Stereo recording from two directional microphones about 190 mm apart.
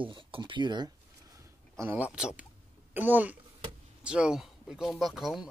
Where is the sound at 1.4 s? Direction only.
15° right (ahead or behind).